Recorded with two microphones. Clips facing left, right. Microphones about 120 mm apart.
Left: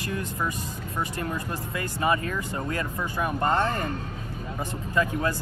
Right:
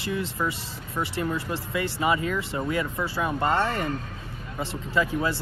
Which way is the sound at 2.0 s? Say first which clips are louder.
Even; 20° right (ahead or behind).